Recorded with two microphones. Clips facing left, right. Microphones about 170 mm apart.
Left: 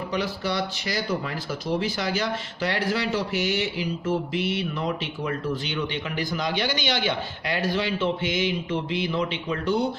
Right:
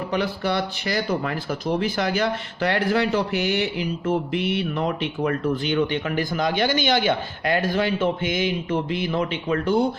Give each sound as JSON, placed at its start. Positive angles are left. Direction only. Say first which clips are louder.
{"t": 0.1, "sound": "speech", "louder": "right 4 dB", "side_deg": -55}